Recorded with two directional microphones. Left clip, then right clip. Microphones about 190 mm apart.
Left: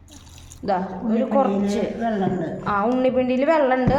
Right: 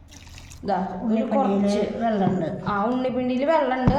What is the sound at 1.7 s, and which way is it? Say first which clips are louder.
Speech: even; 15° right (ahead or behind).